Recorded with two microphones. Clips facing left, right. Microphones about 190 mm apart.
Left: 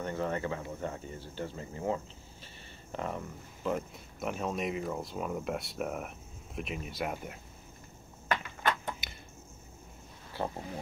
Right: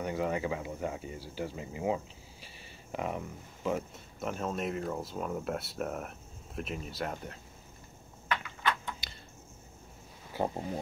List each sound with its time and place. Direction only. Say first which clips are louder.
0.0 s speech: right 1 dB; 10° right (ahead or behind); by 7.3 s 10° left (ahead or behind)
8.3 s a sound: left 1 dB; 45° left (ahead or behind)
10.3 s speech: right 3 dB; 15° right (ahead or behind)